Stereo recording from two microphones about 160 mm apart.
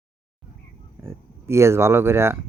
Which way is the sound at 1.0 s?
15° right (ahead or behind).